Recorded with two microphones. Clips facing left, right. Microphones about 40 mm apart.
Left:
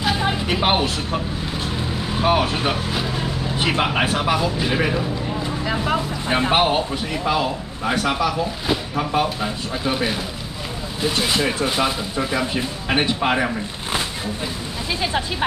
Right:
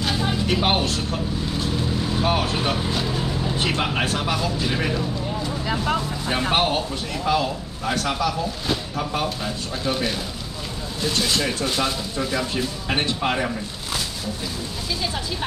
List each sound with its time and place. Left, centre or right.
0.2 s speech: centre